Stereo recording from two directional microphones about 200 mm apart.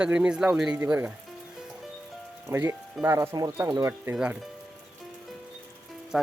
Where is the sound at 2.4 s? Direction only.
15° right (ahead or behind).